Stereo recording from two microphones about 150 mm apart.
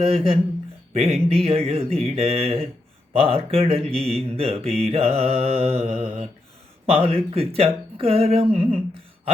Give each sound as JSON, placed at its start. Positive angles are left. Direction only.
{"t": 0.0, "sound": "speech", "side_deg": -40}